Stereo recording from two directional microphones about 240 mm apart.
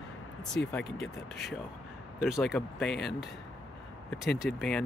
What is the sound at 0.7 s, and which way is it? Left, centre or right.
Speech, centre.